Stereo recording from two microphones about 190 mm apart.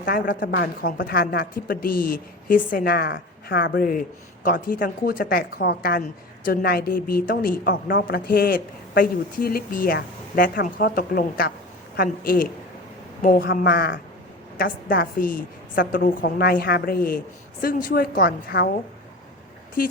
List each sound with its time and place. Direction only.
0.0 s speech: 50° left (ahead or behind)